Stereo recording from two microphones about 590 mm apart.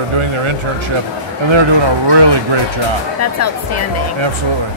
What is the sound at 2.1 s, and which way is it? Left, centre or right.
Speech, right.